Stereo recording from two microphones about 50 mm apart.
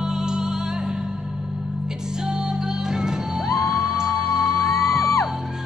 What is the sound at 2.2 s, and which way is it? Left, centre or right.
Music, centre.